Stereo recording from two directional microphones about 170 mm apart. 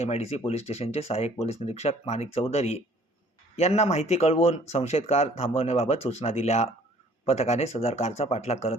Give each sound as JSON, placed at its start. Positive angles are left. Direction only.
{"t": 0.0, "sound": "speech", "side_deg": 40}